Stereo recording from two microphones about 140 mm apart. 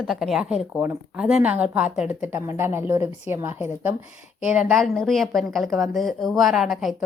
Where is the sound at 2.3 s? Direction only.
15° right (ahead or behind).